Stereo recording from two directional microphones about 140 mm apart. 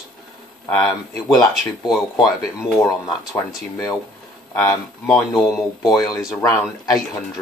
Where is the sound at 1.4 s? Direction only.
30° left (ahead or behind).